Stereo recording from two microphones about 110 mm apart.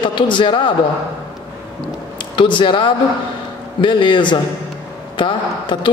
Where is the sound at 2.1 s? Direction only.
45° left (ahead or behind).